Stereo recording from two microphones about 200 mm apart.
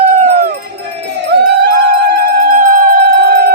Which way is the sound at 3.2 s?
55° right (ahead or behind).